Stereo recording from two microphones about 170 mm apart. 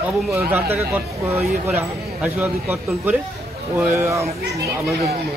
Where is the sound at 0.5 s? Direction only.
10° right (ahead or behind).